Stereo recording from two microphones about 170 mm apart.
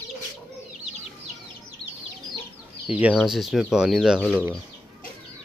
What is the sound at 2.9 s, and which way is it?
Speech, 5° right (ahead or behind).